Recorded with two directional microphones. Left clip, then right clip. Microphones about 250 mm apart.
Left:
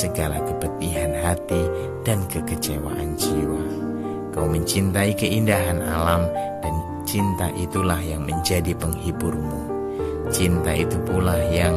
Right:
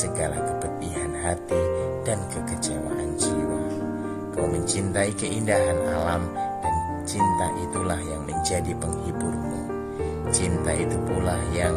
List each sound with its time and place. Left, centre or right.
5.5 s music: left